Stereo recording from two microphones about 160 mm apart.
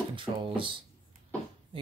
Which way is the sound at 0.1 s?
30° right (ahead or behind).